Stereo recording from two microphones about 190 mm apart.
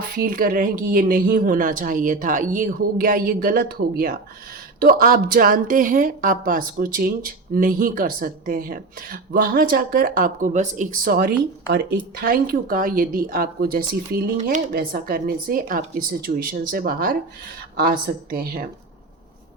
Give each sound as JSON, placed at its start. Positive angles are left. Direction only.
{"t": 0.1, "sound": "a woman's voice", "side_deg": -50}